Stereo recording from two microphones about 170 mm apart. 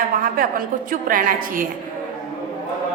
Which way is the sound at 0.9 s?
55° right (ahead or behind).